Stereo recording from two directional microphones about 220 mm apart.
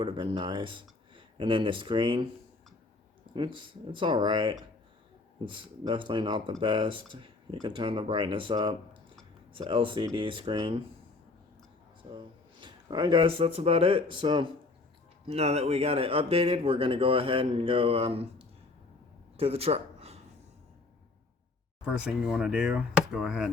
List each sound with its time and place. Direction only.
0.0 s speech: 20° right (ahead or behind)
3.3 s speech: 20° right (ahead or behind)
12.1 s speech: 20° right (ahead or behind)
21.8 s speech: 5° right (ahead or behind)